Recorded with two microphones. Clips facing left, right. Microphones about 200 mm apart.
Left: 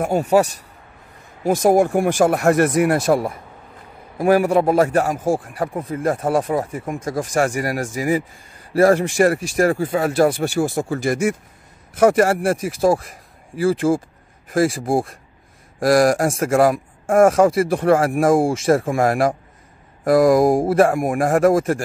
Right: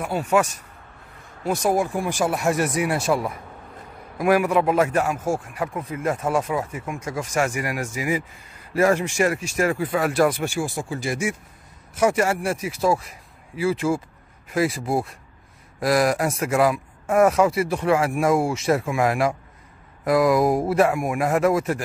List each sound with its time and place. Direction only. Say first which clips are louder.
0.0 s speech: left 5 dB; 40° left (ahead or behind)
1.5 s speech: left 7 dB; 55° left (ahead or behind)
2.2 s speech: left 5 dB; 55° left (ahead or behind); by 10.6 s 35° left (ahead or behind)
10.6 s a man's voice: left 7 dB; 45° left (ahead or behind)
20.7 s speech: left 4 dB; 50° left (ahead or behind)